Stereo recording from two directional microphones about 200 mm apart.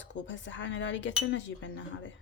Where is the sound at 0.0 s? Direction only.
65° left (ahead or behind).